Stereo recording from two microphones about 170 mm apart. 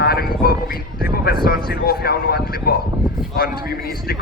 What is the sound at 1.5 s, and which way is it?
A man's voice, 65° left (ahead or behind).